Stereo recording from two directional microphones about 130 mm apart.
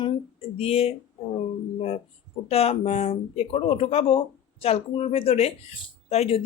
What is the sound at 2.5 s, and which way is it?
Speech, 50° left (ahead or behind).